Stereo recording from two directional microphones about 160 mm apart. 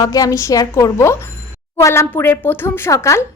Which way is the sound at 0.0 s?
20° left (ahead or behind).